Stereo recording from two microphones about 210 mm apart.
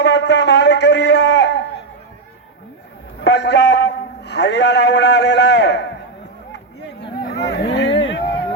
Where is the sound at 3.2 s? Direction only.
55° left (ahead or behind).